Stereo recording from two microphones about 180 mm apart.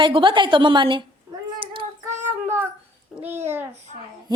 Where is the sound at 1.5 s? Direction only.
30° right (ahead or behind).